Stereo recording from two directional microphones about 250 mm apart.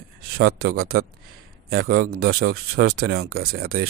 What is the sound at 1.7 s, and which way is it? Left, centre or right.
A man's voice, right.